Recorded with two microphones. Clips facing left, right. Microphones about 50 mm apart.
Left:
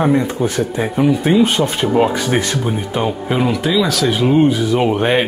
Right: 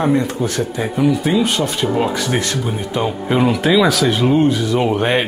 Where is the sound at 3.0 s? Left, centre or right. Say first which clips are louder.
Right 2 dB; centre.